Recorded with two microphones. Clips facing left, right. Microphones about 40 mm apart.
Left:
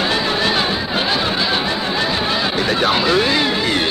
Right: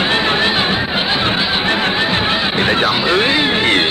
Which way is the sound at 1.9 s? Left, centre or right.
Right.